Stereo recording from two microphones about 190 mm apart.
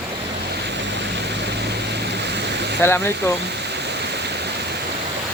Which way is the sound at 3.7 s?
60° right (ahead or behind).